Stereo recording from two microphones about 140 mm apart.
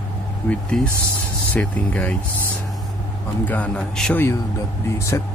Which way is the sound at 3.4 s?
10° left (ahead or behind).